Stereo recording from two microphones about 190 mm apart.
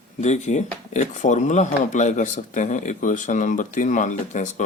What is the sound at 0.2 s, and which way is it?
Speech, 40° left (ahead or behind).